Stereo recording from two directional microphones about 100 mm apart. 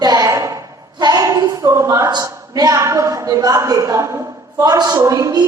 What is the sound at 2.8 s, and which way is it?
A woman's voice, 30° right (ahead or behind).